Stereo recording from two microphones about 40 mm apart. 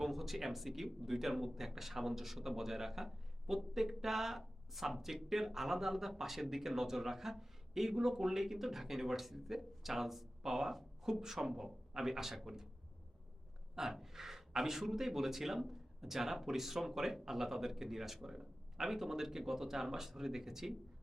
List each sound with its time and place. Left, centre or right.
0.0 s a man's voice: centre
13.7 s a man's voice: centre